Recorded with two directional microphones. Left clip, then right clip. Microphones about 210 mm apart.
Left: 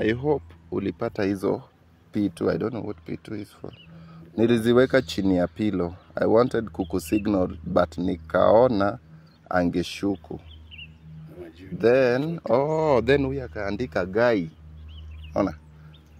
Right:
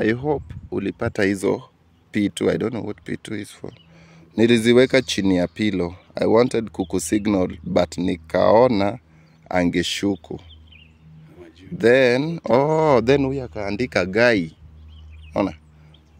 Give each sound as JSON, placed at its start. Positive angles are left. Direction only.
{"t": 0.0, "sound": "speech", "side_deg": -35}
{"t": 11.8, "sound": "speech", "side_deg": -35}